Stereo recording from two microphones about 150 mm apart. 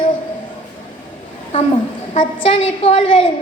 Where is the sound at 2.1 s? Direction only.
40° left (ahead or behind).